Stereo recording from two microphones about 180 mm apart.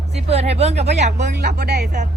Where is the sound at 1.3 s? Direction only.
60° right (ahead or behind).